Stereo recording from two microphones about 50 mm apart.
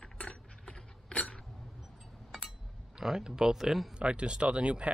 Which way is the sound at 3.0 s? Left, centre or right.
Centre.